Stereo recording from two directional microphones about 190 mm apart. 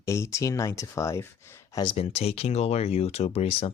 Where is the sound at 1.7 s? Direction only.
25° left (ahead or behind).